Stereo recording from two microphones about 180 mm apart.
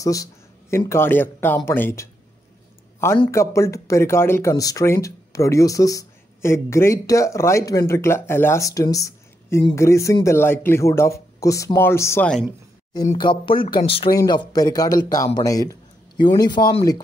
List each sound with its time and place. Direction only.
0.0 s speech: 20° left (ahead or behind)
3.3 s speech: 15° left (ahead or behind)
13.2 s a man's voice: 25° left (ahead or behind)